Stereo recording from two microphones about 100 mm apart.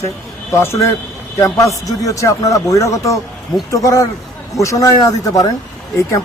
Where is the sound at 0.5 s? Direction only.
25° left (ahead or behind).